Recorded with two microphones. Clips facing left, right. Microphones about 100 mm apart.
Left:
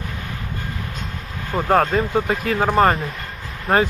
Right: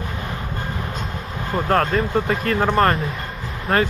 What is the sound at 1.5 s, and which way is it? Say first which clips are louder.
Speech: left 2 dB; 5° left (ahead or behind).